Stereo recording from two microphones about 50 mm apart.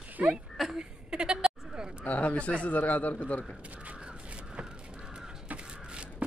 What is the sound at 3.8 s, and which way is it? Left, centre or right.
Crow, right.